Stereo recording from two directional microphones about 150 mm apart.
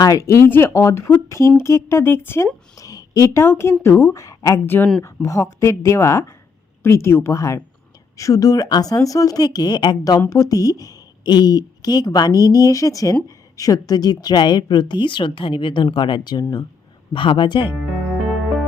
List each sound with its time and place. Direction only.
0.0 s a woman's voice: 20° left (ahead or behind)
17.1 s a woman's voice: 30° left (ahead or behind)